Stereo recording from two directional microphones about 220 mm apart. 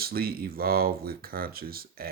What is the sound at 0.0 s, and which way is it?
Speech, 45° right (ahead or behind).